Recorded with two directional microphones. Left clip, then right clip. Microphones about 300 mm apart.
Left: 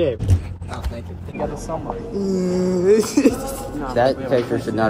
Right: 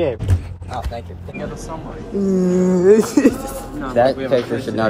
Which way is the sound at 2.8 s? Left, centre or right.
Right.